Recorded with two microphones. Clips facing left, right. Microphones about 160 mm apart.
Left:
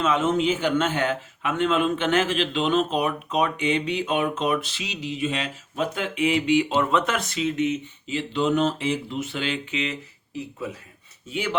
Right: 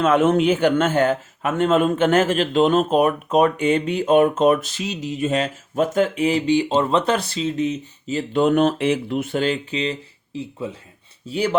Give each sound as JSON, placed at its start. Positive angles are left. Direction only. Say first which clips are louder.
{"t": 0.0, "sound": "a man's voice", "louder": "right 6 dB", "side_deg": -60}